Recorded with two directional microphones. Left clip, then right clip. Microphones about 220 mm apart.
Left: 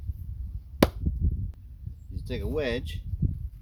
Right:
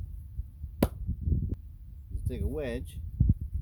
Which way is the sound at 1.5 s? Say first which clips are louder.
Right 16 dB; centre (ahead or behind).